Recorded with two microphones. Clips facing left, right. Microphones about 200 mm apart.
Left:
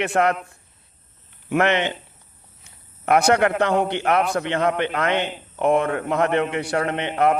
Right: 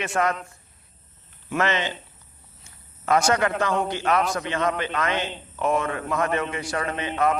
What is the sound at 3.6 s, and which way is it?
A man's voice, 60° left (ahead or behind).